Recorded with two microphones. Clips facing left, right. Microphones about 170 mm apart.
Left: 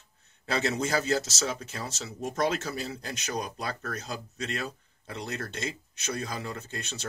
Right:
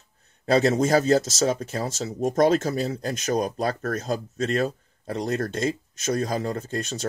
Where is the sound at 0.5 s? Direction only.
45° right (ahead or behind).